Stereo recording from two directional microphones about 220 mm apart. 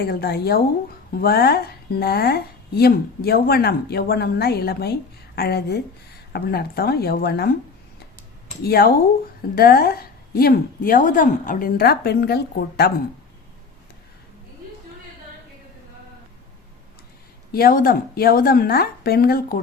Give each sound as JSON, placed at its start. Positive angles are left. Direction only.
{"t": 0.0, "sound": "speech", "side_deg": 45}
{"t": 8.6, "sound": "speech", "side_deg": 45}
{"t": 17.5, "sound": "speech", "side_deg": 40}